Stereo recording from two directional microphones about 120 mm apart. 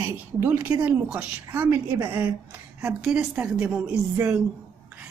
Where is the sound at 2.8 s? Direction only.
5° right (ahead or behind).